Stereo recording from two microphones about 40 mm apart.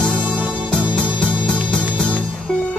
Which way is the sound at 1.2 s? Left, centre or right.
Left.